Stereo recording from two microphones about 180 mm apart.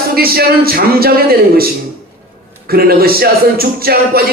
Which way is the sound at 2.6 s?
55° right (ahead or behind).